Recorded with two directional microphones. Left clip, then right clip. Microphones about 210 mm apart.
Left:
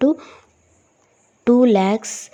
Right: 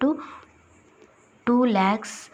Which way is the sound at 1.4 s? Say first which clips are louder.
Left 6 dB; 45° left (ahead or behind).